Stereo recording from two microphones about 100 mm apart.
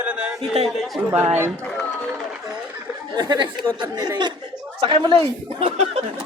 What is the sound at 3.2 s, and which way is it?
Speech, 45° right (ahead or behind).